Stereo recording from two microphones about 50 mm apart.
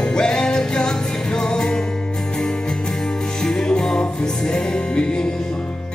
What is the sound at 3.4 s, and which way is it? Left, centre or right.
Music, centre.